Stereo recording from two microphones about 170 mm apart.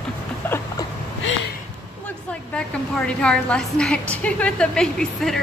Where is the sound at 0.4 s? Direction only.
10° left (ahead or behind).